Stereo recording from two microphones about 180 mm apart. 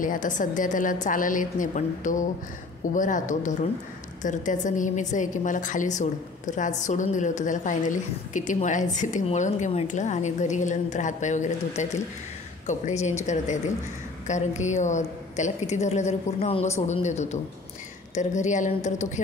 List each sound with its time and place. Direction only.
0.0 s a woman's voice: 45° left (ahead or behind)